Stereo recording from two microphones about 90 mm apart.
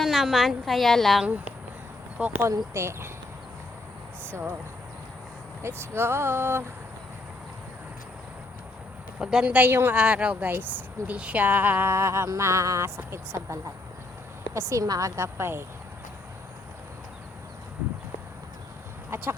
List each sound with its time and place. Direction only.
0.0 s a woman's voice: centre (ahead or behind)
2.2 s a woman's voice: 20° right (ahead or behind)
4.3 s speech: 25° right (ahead or behind)
5.6 s speech: 30° right (ahead or behind)
9.1 s a woman's voice: 10° right (ahead or behind); by 15.6 s 25° right (ahead or behind)
19.1 s chicken: 30° right (ahead or behind)